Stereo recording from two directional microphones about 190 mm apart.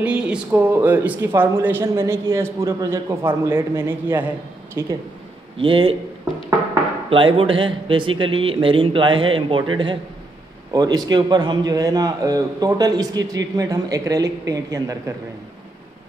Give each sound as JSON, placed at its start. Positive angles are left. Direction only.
{"t": 0.0, "sound": "a man's voice", "side_deg": -5}
{"t": 7.1, "sound": "a man's voice", "side_deg": -30}
{"t": 10.7, "sound": "a man's voice", "side_deg": -20}